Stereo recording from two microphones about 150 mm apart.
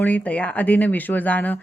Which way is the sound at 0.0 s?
10° left (ahead or behind).